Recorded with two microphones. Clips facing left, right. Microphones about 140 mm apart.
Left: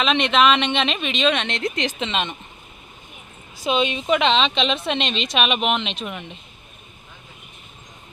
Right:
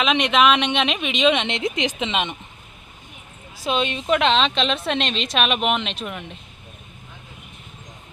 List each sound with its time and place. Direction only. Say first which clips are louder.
0.0 s speech: even; 10° right (ahead or behind)
3.6 s a woman's voice: left 2 dB; centre (ahead or behind)